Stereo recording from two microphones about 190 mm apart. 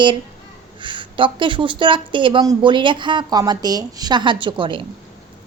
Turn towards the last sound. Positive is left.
turn(degrees=-25)  # may be behind; listen again after turning